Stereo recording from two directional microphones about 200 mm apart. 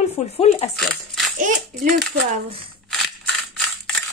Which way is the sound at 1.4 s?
40° right (ahead or behind).